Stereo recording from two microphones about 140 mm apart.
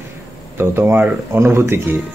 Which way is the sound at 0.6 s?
15° right (ahead or behind).